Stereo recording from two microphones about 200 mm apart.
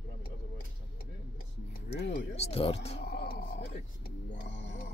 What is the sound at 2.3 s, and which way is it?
Speech, 30° left (ahead or behind).